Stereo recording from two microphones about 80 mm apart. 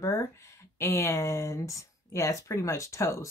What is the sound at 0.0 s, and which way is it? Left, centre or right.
Speech, left.